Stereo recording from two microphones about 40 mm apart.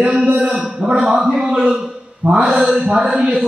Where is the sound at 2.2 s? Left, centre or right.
Right.